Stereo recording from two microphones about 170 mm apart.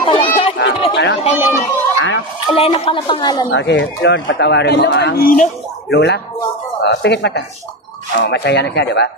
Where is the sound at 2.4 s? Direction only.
30° left (ahead or behind).